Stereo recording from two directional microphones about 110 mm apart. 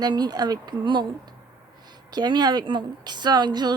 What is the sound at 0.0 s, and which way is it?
A woman's voice, 40° right (ahead or behind).